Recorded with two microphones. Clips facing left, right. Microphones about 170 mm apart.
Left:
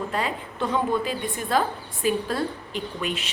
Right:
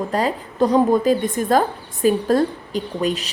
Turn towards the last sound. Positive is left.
turn(degrees=-40)  # may be behind; listen again after turning